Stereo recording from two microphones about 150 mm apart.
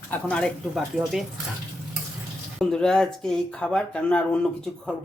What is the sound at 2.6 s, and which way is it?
Speech, 5° left (ahead or behind).